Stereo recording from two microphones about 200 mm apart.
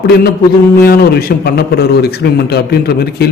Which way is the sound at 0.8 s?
50° left (ahead or behind).